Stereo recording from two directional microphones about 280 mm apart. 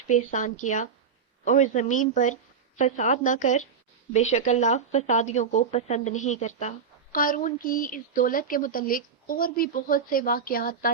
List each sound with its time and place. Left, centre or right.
0.1 s speech: left